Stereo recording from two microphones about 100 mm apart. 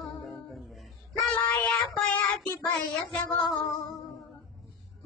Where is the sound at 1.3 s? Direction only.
10° left (ahead or behind).